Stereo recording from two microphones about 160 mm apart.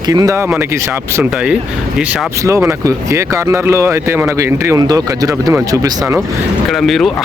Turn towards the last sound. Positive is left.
turn(degrees=0)  # may be behind; listen again after turning